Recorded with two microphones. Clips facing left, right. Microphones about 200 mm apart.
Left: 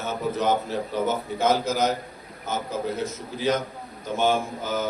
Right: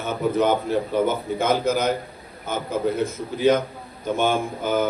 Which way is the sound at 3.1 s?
55° right (ahead or behind).